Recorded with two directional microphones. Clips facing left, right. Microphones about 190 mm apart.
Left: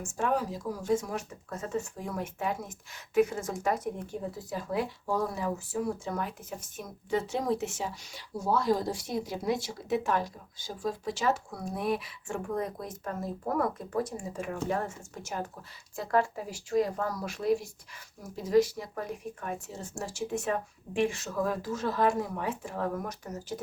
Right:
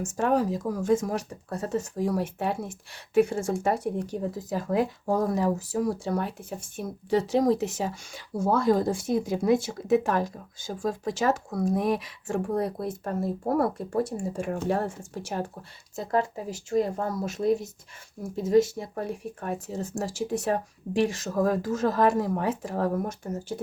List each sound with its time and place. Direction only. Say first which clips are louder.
0.2 s speech: right 5 dB; 40° right (ahead or behind)
4.4 s speech: right 6 dB; 45° right (ahead or behind); by 23.6 s 30° right (ahead or behind)